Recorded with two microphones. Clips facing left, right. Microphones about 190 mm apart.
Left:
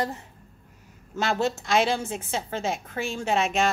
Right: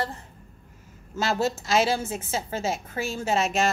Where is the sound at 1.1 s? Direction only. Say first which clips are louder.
Even; 5° right (ahead or behind).